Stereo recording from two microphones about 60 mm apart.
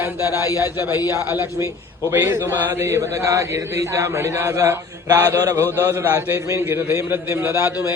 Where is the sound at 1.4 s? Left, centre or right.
Right.